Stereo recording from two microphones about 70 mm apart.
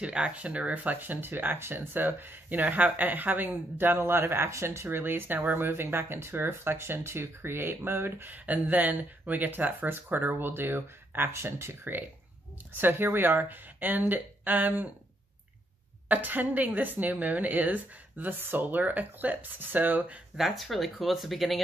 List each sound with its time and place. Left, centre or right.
0.0 s speech: centre
16.1 s speech: right
20.3 s speech: centre